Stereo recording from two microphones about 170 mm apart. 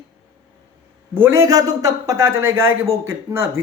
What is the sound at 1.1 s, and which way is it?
Speech, 15° right (ahead or behind).